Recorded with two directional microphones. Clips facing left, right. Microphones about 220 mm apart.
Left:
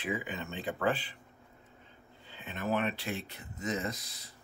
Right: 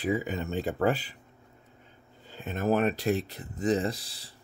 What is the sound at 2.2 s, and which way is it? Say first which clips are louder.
Speech: right 7 dB; 45° right (ahead or behind).